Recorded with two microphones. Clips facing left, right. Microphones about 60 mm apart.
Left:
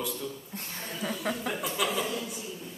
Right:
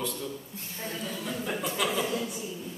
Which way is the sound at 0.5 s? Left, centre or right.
Left.